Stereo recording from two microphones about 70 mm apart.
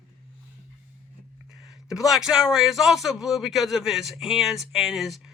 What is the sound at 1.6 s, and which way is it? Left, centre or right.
A man's voice, centre.